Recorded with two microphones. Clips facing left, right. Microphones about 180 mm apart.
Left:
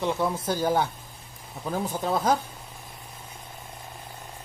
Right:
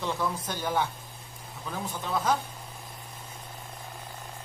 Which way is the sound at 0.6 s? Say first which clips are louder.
Left 4 dB; 40° left (ahead or behind).